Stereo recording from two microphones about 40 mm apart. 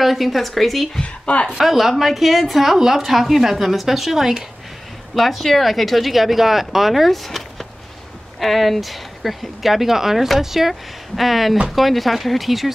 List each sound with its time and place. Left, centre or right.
0.0 s speech: centre
1.0 s speech: left
1.6 s speech: centre
5.1 s speech: centre
7.2 s a sound: centre
8.4 s speech: centre